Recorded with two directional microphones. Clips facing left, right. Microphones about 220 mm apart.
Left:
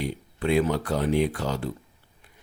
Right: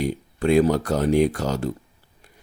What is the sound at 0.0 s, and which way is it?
Speech, 45° right (ahead or behind).